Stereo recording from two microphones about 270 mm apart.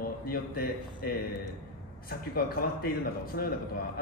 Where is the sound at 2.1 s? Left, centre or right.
Left.